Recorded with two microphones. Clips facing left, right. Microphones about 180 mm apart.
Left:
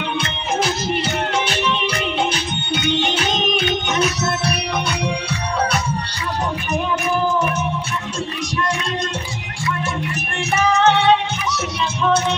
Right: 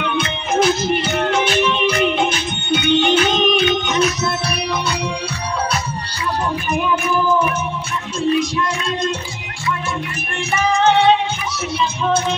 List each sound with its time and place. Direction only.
10.6 s music: 70° left (ahead or behind)